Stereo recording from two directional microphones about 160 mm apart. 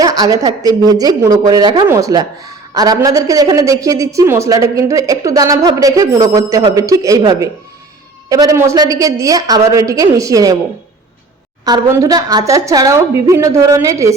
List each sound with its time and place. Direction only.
0.0 s a woman's voice: 25° right (ahead or behind)
11.6 s a woman's voice: 20° right (ahead or behind)